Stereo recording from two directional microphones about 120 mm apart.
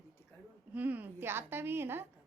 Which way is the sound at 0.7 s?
15° right (ahead or behind).